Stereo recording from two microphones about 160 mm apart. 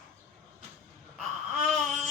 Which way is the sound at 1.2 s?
Centre (ahead or behind).